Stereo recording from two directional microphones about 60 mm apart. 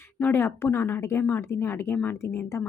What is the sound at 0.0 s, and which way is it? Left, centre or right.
Speech, left.